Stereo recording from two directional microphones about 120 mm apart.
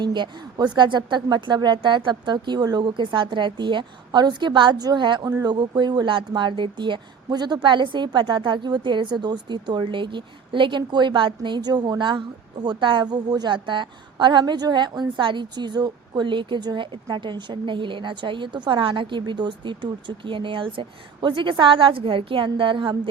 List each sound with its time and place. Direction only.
0.0 s speech: 40° right (ahead or behind)